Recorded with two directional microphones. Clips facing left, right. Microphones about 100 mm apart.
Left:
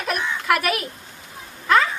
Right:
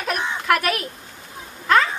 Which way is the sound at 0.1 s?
25° right (ahead or behind).